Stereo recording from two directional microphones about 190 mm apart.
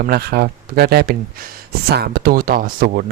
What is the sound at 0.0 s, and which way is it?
Speech, 55° right (ahead or behind).